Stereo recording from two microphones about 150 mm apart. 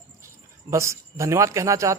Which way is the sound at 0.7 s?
20° right (ahead or behind).